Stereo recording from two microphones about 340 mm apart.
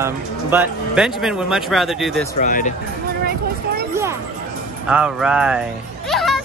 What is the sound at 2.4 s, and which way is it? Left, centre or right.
Speech, left.